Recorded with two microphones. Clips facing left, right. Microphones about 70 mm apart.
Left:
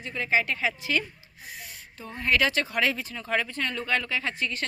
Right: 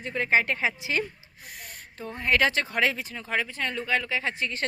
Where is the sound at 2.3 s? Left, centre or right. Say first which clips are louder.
Right 1 dB; right.